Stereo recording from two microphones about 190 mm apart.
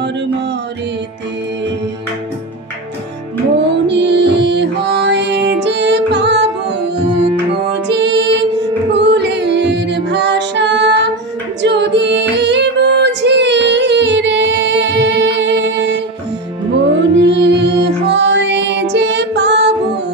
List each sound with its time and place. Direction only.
3.8 s music: 65° right (ahead or behind)
7.7 s music: 65° right (ahead or behind)